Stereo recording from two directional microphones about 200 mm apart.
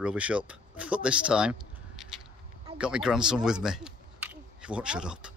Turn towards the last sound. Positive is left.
turn(degrees=-5)  # may be behind; listen again after turning